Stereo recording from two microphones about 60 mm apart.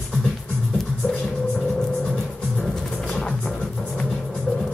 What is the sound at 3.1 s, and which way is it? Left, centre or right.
Music, centre.